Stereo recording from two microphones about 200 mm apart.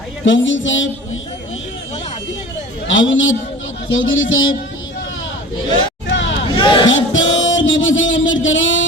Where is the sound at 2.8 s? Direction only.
70° left (ahead or behind).